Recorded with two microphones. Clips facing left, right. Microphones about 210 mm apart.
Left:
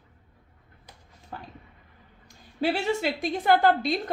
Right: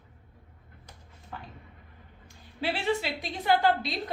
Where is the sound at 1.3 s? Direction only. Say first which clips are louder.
Left 2 dB; 40° left (ahead or behind).